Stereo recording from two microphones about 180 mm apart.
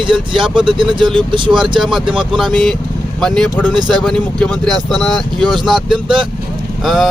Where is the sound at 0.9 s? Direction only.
25° right (ahead or behind).